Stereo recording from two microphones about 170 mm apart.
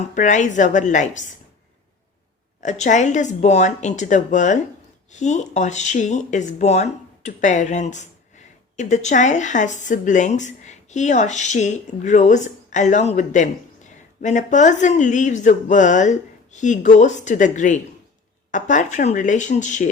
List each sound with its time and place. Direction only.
0.1 s a woman's voice: 45° left (ahead or behind)
2.6 s a woman's voice: 45° left (ahead or behind)